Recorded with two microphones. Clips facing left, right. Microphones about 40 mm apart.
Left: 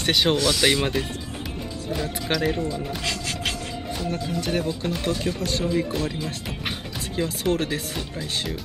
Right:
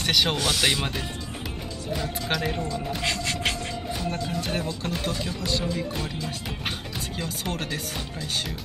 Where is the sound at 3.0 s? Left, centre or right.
Right.